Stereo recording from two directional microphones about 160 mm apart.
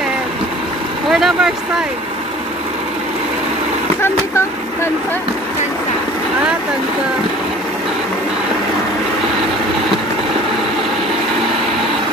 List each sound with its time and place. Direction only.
1.1 s vehicle: centre (ahead or behind)